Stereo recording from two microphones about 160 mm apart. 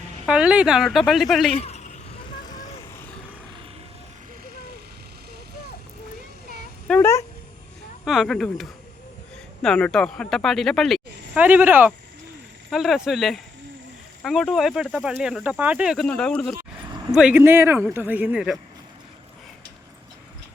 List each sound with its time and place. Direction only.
0.3 s speech: 5° right (ahead or behind)
1.5 s a sound: 40° left (ahead or behind)
6.8 s speech: 5° left (ahead or behind)
11.3 s speech: 10° right (ahead or behind)
12.7 s speech: centre (ahead or behind)